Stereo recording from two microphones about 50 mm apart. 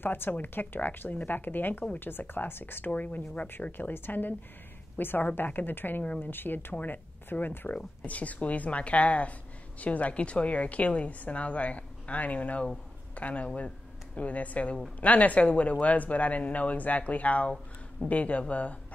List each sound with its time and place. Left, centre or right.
0.0 s speech: left
3.7 s speech: left
6.7 s a woman's voice: left